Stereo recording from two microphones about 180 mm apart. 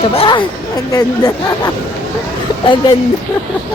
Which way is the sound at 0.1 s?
30° left (ahead or behind).